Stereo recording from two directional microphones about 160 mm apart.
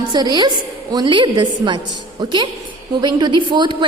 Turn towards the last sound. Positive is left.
turn(degrees=-30)  # may be behind; listen again after turning